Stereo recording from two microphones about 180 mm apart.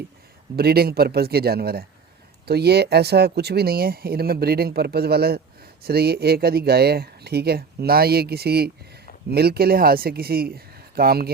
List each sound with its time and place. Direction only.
0.5 s speech: 60° right (ahead or behind)